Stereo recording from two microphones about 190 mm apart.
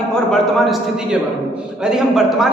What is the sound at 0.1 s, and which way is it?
Speech, centre (ahead or behind).